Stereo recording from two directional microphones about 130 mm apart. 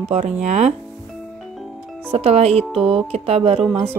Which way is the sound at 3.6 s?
15° right (ahead or behind).